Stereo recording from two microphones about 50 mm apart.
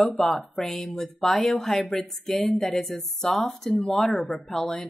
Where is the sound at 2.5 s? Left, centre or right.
Centre.